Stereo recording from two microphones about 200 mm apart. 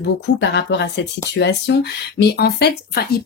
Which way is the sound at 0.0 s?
60° left (ahead or behind).